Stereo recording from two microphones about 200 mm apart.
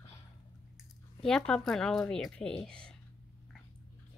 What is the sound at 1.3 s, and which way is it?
Speech, centre (ahead or behind).